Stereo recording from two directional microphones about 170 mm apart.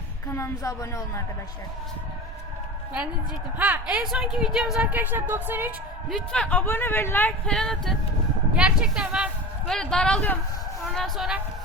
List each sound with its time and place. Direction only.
0.3 s speech: 15° left (ahead or behind)
3.6 s speech: 10° right (ahead or behind)
6.1 s speech: 5° left (ahead or behind)